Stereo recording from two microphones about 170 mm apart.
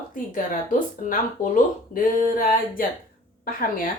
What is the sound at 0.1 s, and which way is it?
A woman's voice, 50° left (ahead or behind).